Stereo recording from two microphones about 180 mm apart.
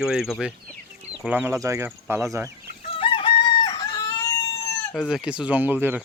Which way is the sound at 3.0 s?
30° left (ahead or behind).